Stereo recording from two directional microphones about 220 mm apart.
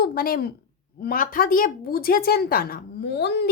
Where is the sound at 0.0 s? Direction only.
45° left (ahead or behind).